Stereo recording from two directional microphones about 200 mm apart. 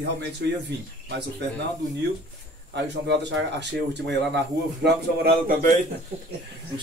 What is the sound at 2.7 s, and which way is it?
Speech, 60° right (ahead or behind).